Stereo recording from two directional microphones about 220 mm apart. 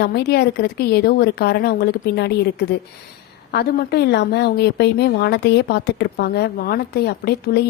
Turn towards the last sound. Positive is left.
turn(degrees=45)  # may be behind; listen again after turning